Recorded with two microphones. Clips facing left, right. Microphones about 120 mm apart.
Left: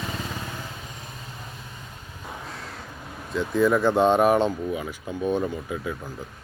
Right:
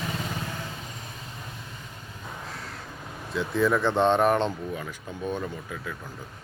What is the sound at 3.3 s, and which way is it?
Speech, centre (ahead or behind).